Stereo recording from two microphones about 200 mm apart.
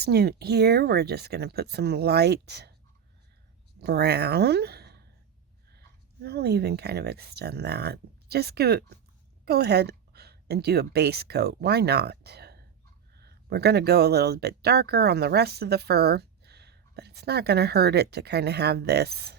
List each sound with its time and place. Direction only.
0.0 s speech: 55° right (ahead or behind)
3.8 s speech: 55° right (ahead or behind)
6.2 s a woman's voice: 55° right (ahead or behind)